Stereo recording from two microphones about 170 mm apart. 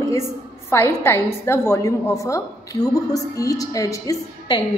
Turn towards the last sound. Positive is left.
turn(degrees=20)  # may be behind; listen again after turning